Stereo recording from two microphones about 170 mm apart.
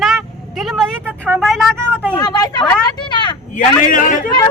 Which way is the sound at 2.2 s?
25° left (ahead or behind).